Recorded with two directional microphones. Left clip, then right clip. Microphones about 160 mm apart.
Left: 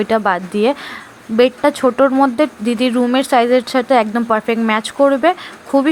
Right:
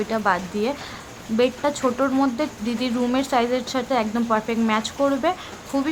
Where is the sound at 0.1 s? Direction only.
35° left (ahead or behind).